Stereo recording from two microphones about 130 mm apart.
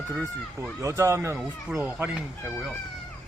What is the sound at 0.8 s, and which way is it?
Speech, 20° right (ahead or behind).